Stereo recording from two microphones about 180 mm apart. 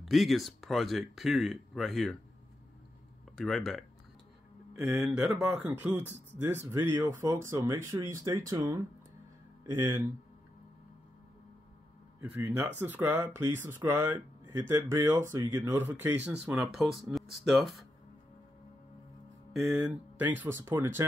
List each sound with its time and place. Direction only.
0.0 s speech: centre (ahead or behind)
3.3 s speech: centre (ahead or behind); by 10.0 s 15° right (ahead or behind)
12.2 s speech: 10° right (ahead or behind)
19.5 s speech: 5° right (ahead or behind)